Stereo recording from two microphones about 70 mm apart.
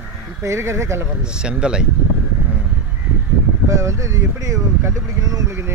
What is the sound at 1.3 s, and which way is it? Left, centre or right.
Speech, centre.